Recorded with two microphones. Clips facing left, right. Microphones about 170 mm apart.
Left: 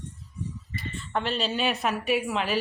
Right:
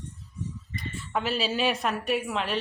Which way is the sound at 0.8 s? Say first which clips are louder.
Even; 5° right (ahead or behind).